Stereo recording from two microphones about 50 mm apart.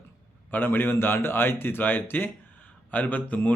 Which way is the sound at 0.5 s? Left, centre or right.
Left.